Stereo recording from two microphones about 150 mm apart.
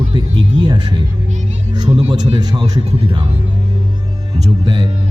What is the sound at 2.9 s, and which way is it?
Speech, 40° right (ahead or behind).